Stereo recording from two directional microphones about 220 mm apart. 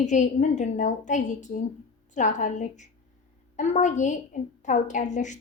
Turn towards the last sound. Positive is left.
turn(degrees=35)  # may be behind; listen again after turning